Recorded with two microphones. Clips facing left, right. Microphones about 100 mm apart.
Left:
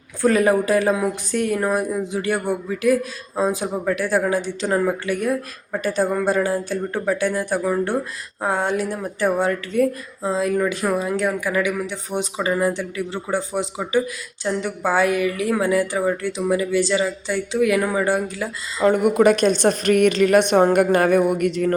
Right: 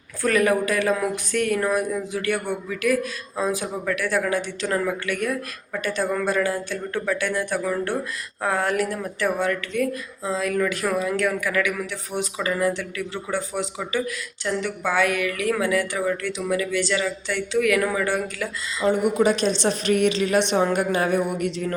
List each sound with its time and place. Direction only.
0.2 s a woman's voice: 30° left (ahead or behind)
18.8 s a woman's voice: 50° left (ahead or behind)